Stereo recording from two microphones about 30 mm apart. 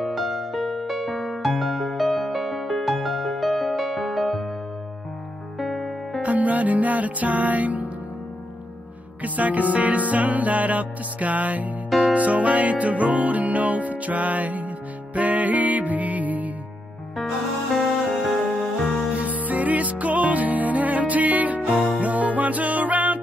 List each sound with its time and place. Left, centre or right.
0.0 s music: centre
5.6 s music: centre
6.2 s music: right
9.2 s music: right
12.0 s music: right
17.7 s music: centre
19.4 s music: right